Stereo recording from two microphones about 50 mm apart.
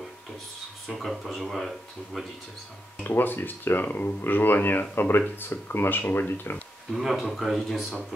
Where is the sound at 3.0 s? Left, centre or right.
Left.